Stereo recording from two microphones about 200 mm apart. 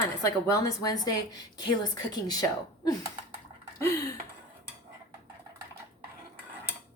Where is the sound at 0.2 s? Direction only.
20° left (ahead or behind).